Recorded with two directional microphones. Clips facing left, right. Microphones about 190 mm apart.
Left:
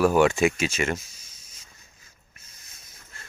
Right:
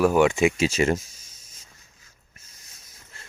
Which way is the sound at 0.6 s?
35° right (ahead or behind).